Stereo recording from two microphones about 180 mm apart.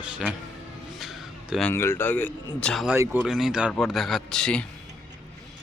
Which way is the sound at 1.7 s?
15° left (ahead or behind).